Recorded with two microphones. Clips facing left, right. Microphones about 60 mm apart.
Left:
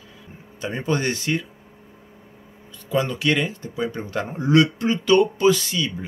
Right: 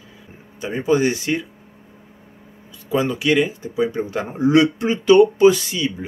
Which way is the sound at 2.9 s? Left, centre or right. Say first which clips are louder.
Right 3 dB; centre.